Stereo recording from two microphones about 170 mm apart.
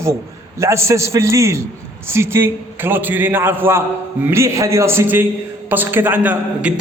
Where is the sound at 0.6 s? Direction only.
15° right (ahead or behind).